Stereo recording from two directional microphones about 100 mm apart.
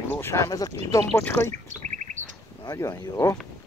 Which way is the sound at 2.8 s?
35° left (ahead or behind).